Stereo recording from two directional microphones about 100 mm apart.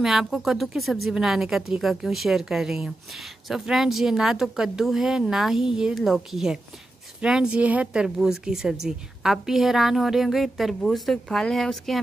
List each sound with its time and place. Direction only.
0.0 s speech: 5° right (ahead or behind)